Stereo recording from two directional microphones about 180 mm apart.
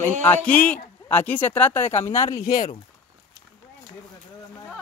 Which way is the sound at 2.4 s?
45° left (ahead or behind).